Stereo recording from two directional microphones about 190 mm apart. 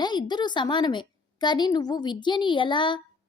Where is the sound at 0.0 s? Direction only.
20° left (ahead or behind).